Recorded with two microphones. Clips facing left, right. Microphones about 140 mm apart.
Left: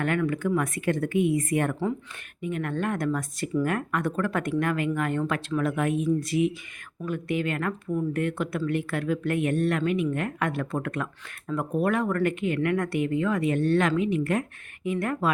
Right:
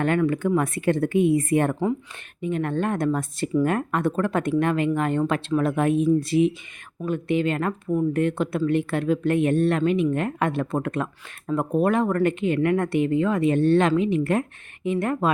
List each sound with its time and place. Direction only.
0.0 s speech: 30° right (ahead or behind)